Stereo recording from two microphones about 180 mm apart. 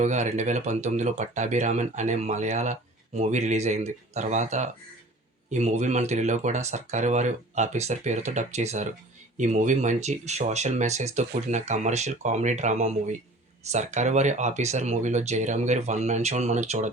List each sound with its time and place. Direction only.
0.0 s speech: 40° right (ahead or behind)